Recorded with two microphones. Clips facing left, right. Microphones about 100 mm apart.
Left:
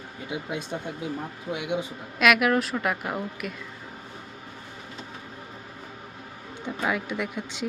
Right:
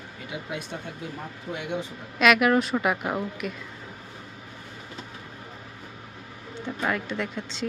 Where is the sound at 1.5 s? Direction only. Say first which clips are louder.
Left 2 dB; 5° left (ahead or behind).